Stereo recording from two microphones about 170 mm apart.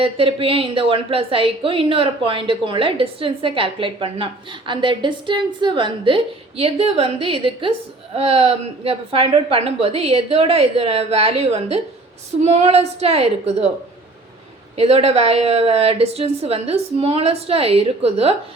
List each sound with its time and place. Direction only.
0.0 s a woman's voice: 30° right (ahead or behind)
14.8 s a woman's voice: 35° right (ahead or behind)